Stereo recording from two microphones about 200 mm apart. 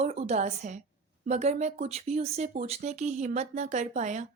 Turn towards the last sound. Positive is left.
turn(degrees=-35)  # may be behind; listen again after turning